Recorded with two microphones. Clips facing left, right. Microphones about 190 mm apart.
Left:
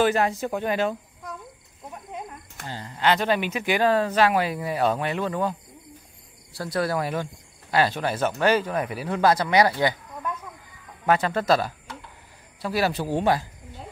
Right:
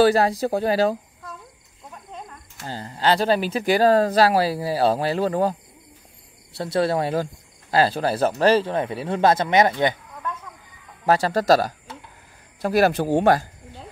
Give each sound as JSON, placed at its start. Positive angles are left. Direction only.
{"t": 0.0, "sound": "speech", "side_deg": -35}
{"t": 2.6, "sound": "speech", "side_deg": -35}
{"t": 6.5, "sound": "speech", "side_deg": -25}
{"t": 11.1, "sound": "speech", "side_deg": -35}